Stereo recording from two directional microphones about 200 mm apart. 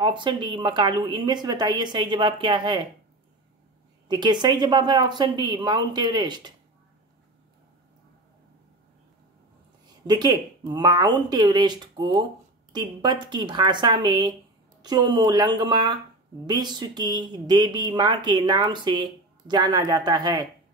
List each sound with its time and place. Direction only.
0.0 s speech: 25° right (ahead or behind)
4.1 s speech: 20° right (ahead or behind)
10.0 s speech: 20° right (ahead or behind)